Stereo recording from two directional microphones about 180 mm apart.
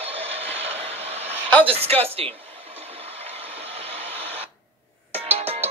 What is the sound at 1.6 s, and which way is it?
Speech, 35° right (ahead or behind).